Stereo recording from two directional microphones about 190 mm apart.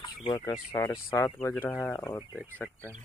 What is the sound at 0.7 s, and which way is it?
Speech, 15° left (ahead or behind).